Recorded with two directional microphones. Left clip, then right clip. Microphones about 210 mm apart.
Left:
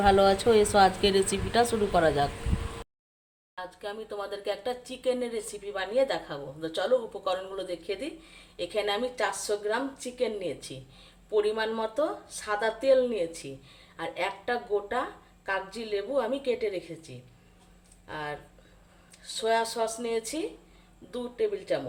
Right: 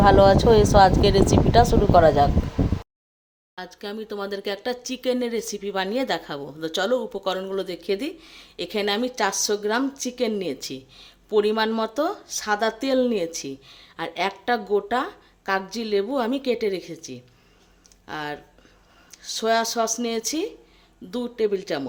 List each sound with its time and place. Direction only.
0.0 s speech: 15° right (ahead or behind)
3.6 s speech: 50° right (ahead or behind)